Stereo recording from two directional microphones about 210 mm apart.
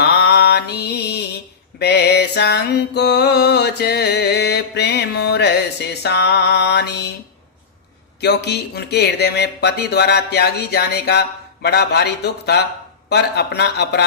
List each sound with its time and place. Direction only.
0.0 s mantra: 50° left (ahead or behind)
6.0 s music: 50° left (ahead or behind)
8.2 s speech: 50° left (ahead or behind)